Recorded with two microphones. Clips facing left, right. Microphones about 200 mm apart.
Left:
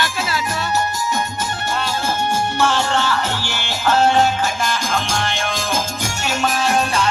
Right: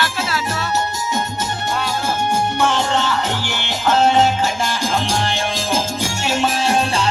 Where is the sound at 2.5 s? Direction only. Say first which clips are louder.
Left 1 dB; 20° right (ahead or behind).